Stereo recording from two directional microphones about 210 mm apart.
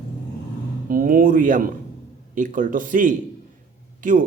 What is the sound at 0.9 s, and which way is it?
Speech, 40° right (ahead or behind).